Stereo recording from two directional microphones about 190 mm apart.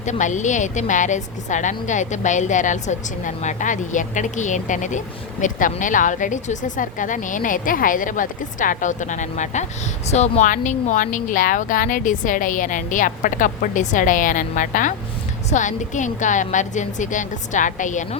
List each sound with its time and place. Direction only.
0.0 s a woman's voice: 40° left (ahead or behind)